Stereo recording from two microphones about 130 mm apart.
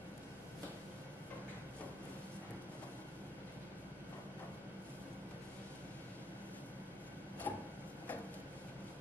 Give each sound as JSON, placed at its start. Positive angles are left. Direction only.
{"t": 7.5, "sound": "vehicle", "side_deg": 15}